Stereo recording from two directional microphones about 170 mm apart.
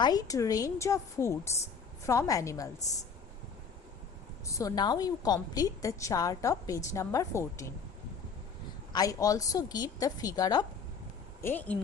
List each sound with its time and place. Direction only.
0.0 s a woman's voice: 20° left (ahead or behind)
4.4 s a woman's voice: 20° left (ahead or behind)
8.9 s a woman's voice: 20° left (ahead or behind)
11.4 s speech: 10° left (ahead or behind)